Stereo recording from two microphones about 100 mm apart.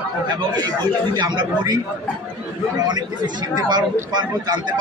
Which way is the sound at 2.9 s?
45° right (ahead or behind).